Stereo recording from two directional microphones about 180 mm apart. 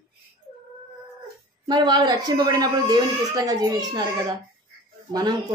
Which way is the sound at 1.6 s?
25° right (ahead or behind).